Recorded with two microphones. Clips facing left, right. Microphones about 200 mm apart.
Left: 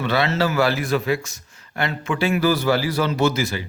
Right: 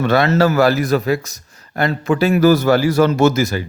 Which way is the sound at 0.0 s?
45° right (ahead or behind).